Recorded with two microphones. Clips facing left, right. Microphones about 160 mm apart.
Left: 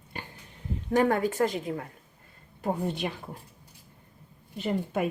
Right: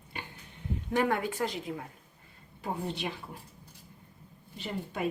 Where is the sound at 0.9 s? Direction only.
40° left (ahead or behind).